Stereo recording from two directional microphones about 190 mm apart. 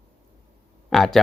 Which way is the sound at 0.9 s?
Centre (ahead or behind).